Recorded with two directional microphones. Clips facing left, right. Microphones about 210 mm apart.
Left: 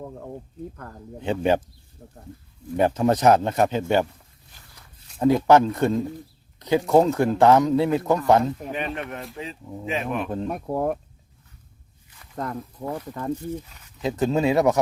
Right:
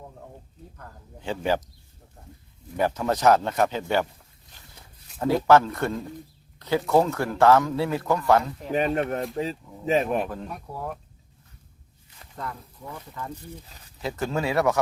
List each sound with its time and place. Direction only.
1.2 s speech: 20° left (ahead or behind)
2.0 s speech: 55° left (ahead or behind)
2.7 s speech: 25° left (ahead or behind)
5.2 s speech: 20° left (ahead or behind)
8.7 s speech: 40° right (ahead or behind)
10.5 s speech: 50° left (ahead or behind)
12.4 s speech: 50° left (ahead or behind)
13.7 s speech: 35° right (ahead or behind)
14.0 s speech: 20° left (ahead or behind)